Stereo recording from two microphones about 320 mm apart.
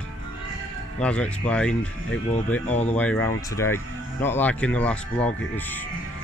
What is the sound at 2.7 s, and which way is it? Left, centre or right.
Speech, left.